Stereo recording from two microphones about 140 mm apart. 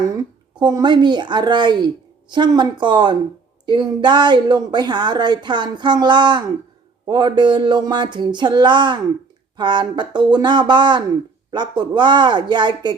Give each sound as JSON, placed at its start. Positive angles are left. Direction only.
{"t": 0.5, "sound": "a woman's voice", "side_deg": -30}